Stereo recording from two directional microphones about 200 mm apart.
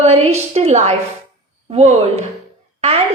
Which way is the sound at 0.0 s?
35° right (ahead or behind).